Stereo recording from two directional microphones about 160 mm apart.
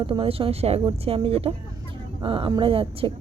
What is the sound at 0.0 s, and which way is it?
Speech, 35° right (ahead or behind).